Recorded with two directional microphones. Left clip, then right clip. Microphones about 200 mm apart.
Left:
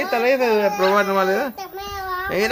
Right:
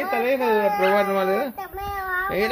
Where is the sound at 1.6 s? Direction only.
20° left (ahead or behind).